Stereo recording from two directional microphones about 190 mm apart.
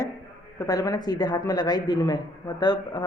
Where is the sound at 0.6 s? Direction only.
20° left (ahead or behind).